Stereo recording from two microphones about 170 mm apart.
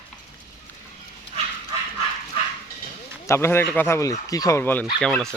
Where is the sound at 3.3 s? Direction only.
15° left (ahead or behind).